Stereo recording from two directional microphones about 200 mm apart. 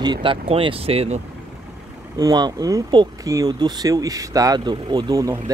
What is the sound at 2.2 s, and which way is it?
Speech, 20° right (ahead or behind).